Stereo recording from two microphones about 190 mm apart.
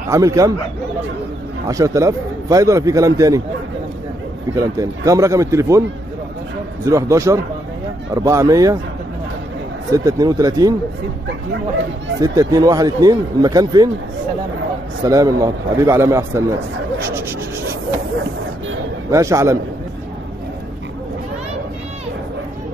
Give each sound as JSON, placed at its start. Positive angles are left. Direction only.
{"t": 0.1, "sound": "a man's voice", "side_deg": -15}
{"t": 1.7, "sound": "a man's voice", "side_deg": -15}
{"t": 4.6, "sound": "a man's voice", "side_deg": -15}
{"t": 9.8, "sound": "a man's voice", "side_deg": -15}
{"t": 12.2, "sound": "speech", "side_deg": -20}
{"t": 15.0, "sound": "a man's voice", "side_deg": -20}
{"t": 19.0, "sound": "a man's voice", "side_deg": -15}